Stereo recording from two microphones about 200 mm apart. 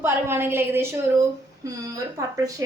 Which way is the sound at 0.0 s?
10° right (ahead or behind).